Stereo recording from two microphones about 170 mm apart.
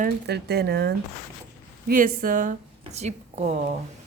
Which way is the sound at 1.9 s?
55° right (ahead or behind).